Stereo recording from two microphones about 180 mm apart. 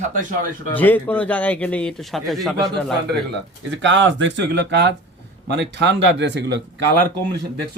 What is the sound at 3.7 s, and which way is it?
Speech, 90° right.